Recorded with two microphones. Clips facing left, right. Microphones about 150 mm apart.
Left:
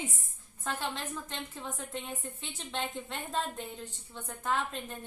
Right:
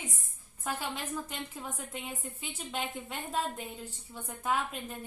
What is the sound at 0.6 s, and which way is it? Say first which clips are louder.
A woman's voice: even; 10° right (ahead or behind).